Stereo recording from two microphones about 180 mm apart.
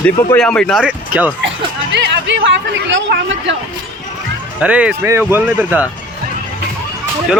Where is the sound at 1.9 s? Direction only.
80° right.